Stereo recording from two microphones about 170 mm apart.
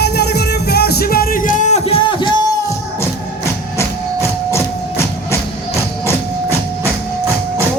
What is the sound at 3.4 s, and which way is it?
Music, 15° left (ahead or behind).